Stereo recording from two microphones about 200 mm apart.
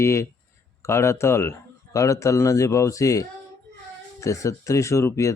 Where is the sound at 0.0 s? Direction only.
15° left (ahead or behind).